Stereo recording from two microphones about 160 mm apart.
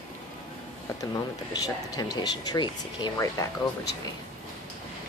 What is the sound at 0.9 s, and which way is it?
Speech, 20° left (ahead or behind).